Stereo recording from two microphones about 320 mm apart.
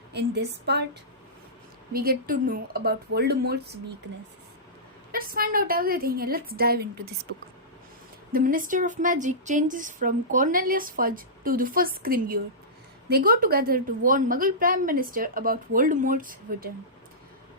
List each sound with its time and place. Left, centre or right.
0.1 s speech: right
1.9 s speech: right
5.1 s speech: right
8.3 s speech: right